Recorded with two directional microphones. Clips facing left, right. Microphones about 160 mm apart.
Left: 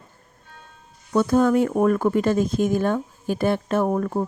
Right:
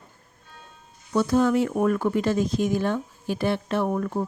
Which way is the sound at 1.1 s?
50° left (ahead or behind).